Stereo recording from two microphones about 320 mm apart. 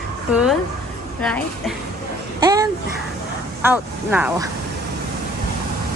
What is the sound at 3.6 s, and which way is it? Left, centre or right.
Speech, centre.